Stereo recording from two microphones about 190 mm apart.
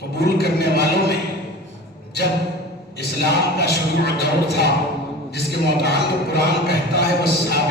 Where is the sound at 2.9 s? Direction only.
60° left (ahead or behind).